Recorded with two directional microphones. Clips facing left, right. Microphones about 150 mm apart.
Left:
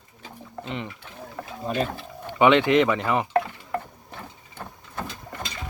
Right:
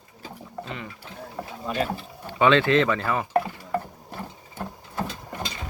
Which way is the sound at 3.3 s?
5° right (ahead or behind).